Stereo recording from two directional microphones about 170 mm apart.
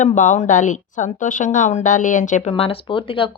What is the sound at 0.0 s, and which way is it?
A woman's voice, 45° left (ahead or behind).